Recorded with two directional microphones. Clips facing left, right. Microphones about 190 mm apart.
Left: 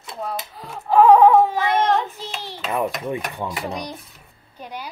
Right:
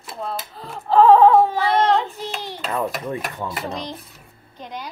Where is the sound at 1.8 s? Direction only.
15° right (ahead or behind).